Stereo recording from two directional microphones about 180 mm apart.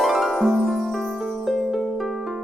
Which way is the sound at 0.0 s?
Centre (ahead or behind).